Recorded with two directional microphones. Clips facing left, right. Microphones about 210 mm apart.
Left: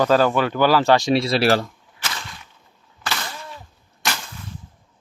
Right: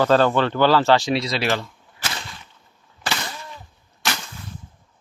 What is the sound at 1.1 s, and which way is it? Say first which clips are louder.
Speech: left 5 dB; 30° left (ahead or behind).